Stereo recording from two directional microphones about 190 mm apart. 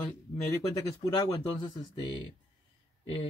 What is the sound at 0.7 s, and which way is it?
Speech, 20° left (ahead or behind).